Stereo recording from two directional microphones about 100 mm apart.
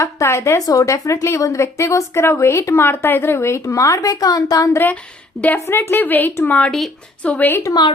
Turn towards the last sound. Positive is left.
turn(degrees=20)  # may be behind; listen again after turning